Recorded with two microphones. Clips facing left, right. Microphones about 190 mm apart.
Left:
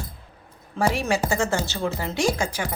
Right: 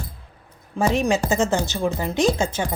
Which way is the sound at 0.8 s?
20° right (ahead or behind).